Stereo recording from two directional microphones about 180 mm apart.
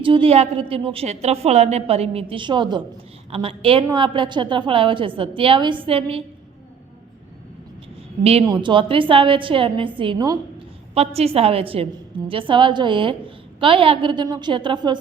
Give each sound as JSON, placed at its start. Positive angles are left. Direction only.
{"t": 0.0, "sound": "a woman's voice", "side_deg": -30}
{"t": 8.2, "sound": "a woman's voice", "side_deg": -35}
{"t": 10.9, "sound": "a woman's voice", "side_deg": -35}